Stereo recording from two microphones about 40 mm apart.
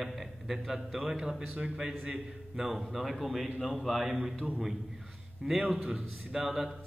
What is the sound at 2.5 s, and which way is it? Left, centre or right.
A man's voice, centre.